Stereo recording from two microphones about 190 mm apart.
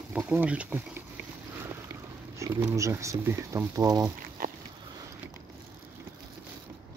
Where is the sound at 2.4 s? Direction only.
15° right (ahead or behind).